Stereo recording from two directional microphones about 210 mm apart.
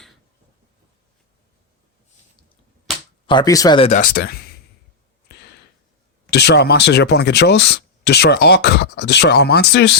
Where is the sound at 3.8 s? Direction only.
40° left (ahead or behind).